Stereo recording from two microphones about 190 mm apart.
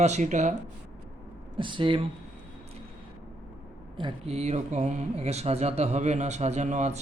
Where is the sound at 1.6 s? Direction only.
25° right (ahead or behind).